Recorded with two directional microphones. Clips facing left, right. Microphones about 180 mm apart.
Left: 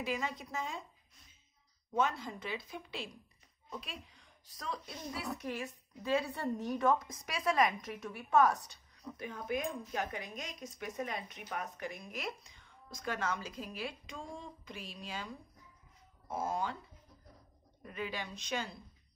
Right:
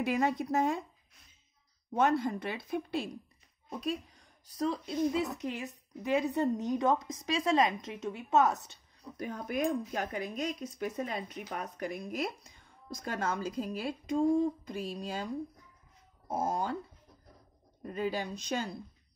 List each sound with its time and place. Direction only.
0.0 s speech: 60° right (ahead or behind)
2.0 s speech: 60° right (ahead or behind)
4.6 s a woman's voice: 20° right (ahead or behind)
9.2 s speech: 40° right (ahead or behind)
9.6 s speech: 55° right (ahead or behind)
10.1 s speech: 35° right (ahead or behind)
16.3 s speech: 40° right (ahead or behind)
17.8 s speech: 40° right (ahead or behind)